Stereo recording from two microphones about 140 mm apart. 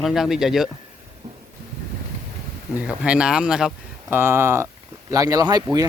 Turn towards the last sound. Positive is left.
turn(degrees=-25)  # may be behind; listen again after turning